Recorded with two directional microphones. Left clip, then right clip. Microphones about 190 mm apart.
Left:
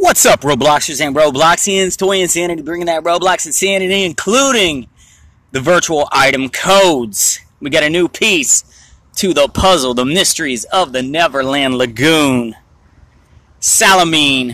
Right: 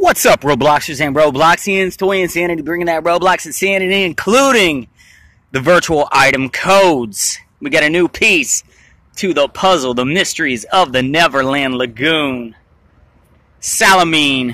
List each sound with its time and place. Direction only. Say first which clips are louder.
0.0 s speech: left 1 dB; centre (ahead or behind)
11.5 s speech: left 2 dB; 10° left (ahead or behind)
13.7 s speech: even; centre (ahead or behind)